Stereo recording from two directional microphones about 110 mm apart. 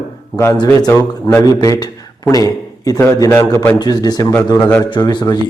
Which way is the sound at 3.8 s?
40° left (ahead or behind).